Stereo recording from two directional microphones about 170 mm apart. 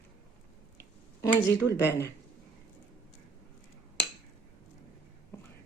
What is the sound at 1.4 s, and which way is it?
Speech, 15° left (ahead or behind).